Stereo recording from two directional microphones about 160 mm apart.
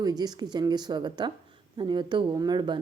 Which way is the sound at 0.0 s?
25° right (ahead or behind).